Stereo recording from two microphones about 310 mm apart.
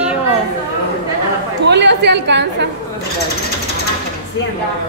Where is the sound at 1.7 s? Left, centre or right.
Right.